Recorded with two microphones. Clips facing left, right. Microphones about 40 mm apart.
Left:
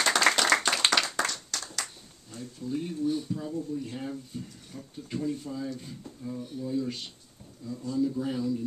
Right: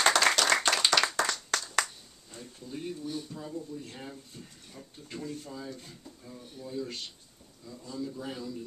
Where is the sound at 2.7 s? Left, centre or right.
Centre.